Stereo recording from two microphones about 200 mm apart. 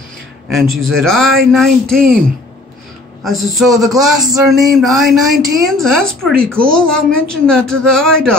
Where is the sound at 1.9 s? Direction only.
45° right (ahead or behind).